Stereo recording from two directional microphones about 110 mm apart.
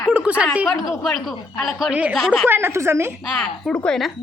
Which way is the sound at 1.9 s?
10° right (ahead or behind).